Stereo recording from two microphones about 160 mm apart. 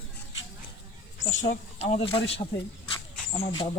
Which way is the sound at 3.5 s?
30° left (ahead or behind).